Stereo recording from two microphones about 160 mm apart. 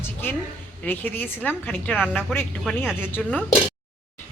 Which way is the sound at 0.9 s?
10° left (ahead or behind).